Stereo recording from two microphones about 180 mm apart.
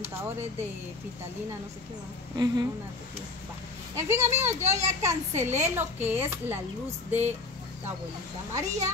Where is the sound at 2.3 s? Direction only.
20° right (ahead or behind).